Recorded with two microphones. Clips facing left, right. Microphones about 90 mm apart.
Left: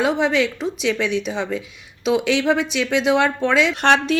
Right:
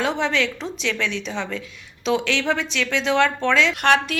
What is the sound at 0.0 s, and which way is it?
Speech, 10° left (ahead or behind).